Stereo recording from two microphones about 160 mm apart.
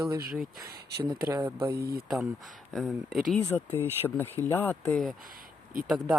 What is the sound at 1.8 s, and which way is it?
Speech, 75° right (ahead or behind).